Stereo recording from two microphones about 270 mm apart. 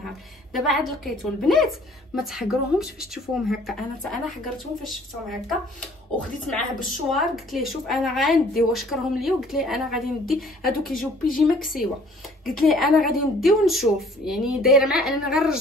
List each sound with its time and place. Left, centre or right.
0.0 s speech: centre
6.1 s speech: centre